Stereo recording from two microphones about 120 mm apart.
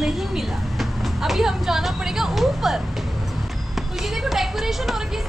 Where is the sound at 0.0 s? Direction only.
Centre (ahead or behind).